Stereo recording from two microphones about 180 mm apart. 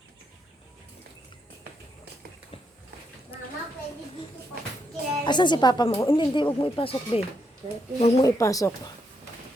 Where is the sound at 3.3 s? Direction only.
30° left (ahead or behind).